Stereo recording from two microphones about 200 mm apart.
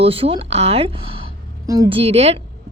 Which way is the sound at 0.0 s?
30° right (ahead or behind).